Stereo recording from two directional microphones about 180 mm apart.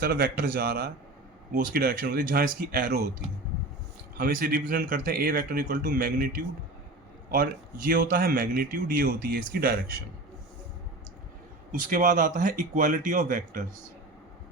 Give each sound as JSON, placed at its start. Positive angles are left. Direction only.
{"t": 0.0, "sound": "speech", "side_deg": -55}
{"t": 4.2, "sound": "speech", "side_deg": -50}
{"t": 11.7, "sound": "speech", "side_deg": -50}